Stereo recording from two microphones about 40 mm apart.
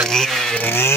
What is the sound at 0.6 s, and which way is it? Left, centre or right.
Speech, left.